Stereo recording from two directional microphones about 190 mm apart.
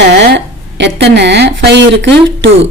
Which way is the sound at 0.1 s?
65° right (ahead or behind).